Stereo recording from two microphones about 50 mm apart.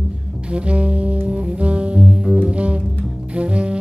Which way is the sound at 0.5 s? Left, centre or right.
Right.